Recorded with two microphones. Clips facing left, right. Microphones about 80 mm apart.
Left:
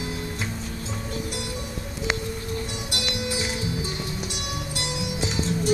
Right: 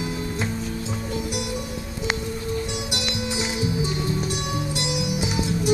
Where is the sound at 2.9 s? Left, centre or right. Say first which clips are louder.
Right 1 dB; centre.